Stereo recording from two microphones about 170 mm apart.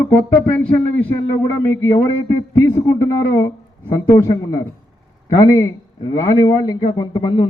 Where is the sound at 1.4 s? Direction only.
15° left (ahead or behind).